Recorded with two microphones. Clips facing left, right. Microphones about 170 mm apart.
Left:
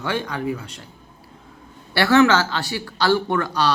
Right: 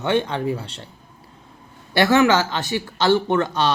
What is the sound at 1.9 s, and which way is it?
Speech, 20° right (ahead or behind).